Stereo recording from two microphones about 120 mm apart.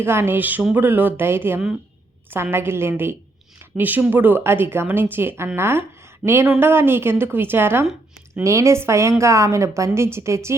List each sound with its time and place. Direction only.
0.0 s a woman's voice: 20° right (ahead or behind)